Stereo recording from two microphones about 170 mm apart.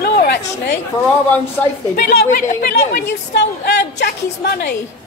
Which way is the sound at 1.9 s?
65° left (ahead or behind).